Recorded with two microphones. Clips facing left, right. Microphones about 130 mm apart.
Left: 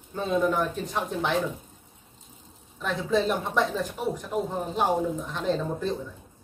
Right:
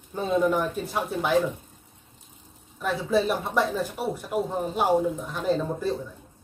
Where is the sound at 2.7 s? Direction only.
10° right (ahead or behind).